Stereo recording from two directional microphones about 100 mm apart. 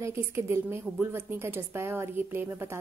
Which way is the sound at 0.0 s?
25° right (ahead or behind).